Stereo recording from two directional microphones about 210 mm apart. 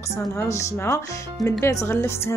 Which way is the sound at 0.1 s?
15° left (ahead or behind).